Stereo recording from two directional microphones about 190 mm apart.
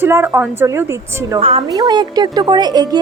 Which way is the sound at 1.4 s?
30° right (ahead or behind).